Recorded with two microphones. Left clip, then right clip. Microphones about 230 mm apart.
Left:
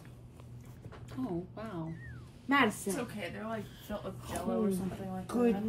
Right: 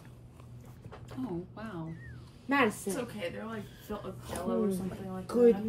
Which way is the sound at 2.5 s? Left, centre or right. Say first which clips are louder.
Even; centre.